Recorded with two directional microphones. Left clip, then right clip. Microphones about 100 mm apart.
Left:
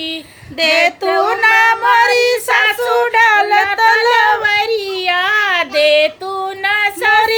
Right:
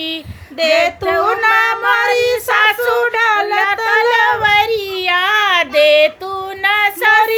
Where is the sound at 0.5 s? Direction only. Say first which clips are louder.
Left 1 dB; 40° left (ahead or behind).